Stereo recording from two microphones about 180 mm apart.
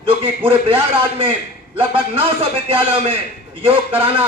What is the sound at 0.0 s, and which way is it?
Speech, 30° right (ahead or behind).